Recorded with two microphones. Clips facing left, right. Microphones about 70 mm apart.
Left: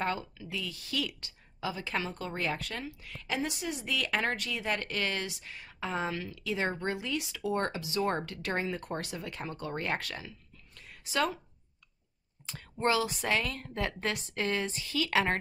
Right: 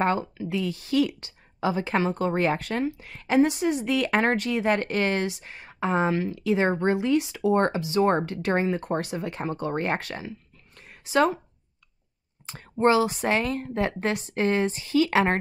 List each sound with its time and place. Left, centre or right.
0.0 s speech: right
10.8 s a sound: right
12.4 s a woman's voice: right